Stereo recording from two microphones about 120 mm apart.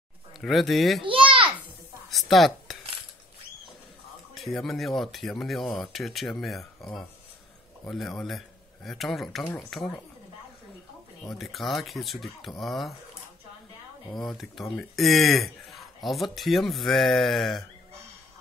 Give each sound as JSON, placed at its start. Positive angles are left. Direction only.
{"t": 0.4, "sound": "speech", "side_deg": 0}
{"t": 1.0, "sound": "a sound", "side_deg": -45}
{"t": 2.0, "sound": "a sound", "side_deg": 0}
{"t": 4.4, "sound": "speech", "side_deg": 0}
{"t": 9.4, "sound": "speech", "side_deg": 15}
{"t": 9.7, "sound": "speech", "side_deg": 5}
{"t": 11.2, "sound": "speech", "side_deg": 0}
{"t": 14.1, "sound": "speech", "side_deg": 0}